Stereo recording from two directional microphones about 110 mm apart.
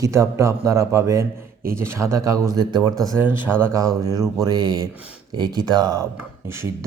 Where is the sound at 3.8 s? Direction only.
35° right (ahead or behind).